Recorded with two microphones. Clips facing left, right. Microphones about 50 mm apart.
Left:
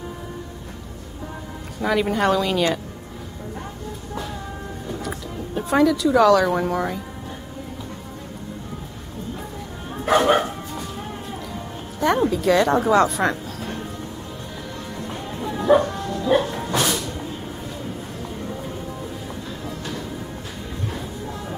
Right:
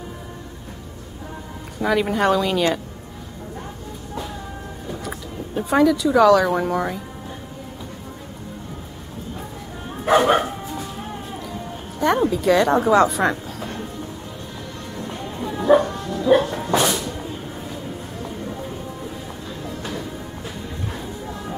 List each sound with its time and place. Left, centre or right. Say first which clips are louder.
1.8 s a woman's voice: right 1 dB; centre
4.8 s speech: left 1 dB; centre
10.0 s bow-wow: right 1 dB; centre
12.0 s a woman's voice: right 1 dB; centre
14.9 s bow-wow: right 2 dB; centre
19.6 s music: right 3 dB; centre
20.9 s a sound: even; centre